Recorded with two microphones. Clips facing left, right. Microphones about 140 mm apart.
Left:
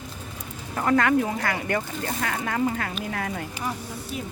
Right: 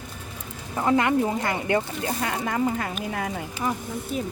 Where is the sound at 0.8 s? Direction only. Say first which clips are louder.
Even; 20° right (ahead or behind).